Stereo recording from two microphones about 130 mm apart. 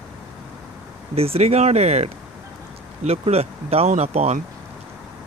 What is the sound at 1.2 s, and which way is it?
Speech, 50° right (ahead or behind).